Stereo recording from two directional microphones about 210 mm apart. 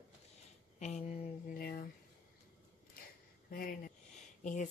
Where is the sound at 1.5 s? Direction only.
45° left (ahead or behind).